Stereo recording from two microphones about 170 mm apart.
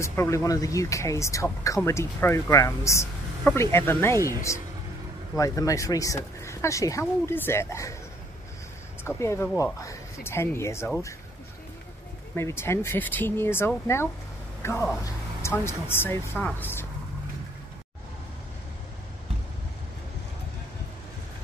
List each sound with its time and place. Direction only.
0.0 s speech: 15° left (ahead or behind)
9.0 s speech: 15° left (ahead or behind)
12.4 s a woman's voice: 15° left (ahead or behind)